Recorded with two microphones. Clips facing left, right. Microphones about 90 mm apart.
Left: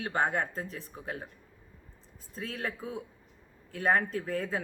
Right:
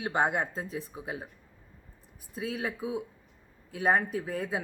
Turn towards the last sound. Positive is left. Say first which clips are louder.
# even
turn(degrees=-10)  # may be behind; listen again after turning